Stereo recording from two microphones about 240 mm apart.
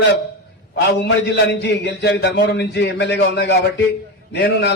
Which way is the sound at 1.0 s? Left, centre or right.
Left.